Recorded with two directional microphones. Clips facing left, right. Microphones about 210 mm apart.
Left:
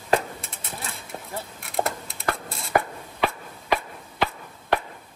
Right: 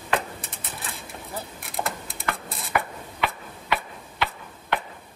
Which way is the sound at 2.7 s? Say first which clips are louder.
Left 3 dB; 45° left (ahead or behind).